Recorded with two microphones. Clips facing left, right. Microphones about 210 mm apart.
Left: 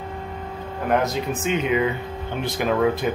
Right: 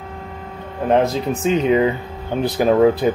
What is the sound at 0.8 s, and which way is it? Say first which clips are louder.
Speech: right 5 dB; 30° right (ahead or behind).